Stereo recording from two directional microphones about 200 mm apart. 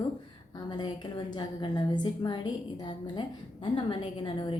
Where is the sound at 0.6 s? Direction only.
20° left (ahead or behind).